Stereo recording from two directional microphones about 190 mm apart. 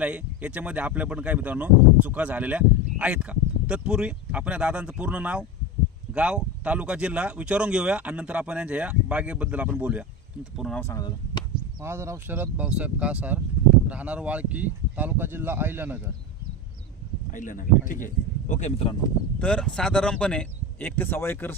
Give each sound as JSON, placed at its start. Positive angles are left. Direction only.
{"t": 0.0, "sound": "speech", "side_deg": -5}
{"t": 10.8, "sound": "speech", "side_deg": 15}
{"t": 11.8, "sound": "speech", "side_deg": -15}
{"t": 17.3, "sound": "speech", "side_deg": 45}
{"t": 19.0, "sound": "speech", "side_deg": 5}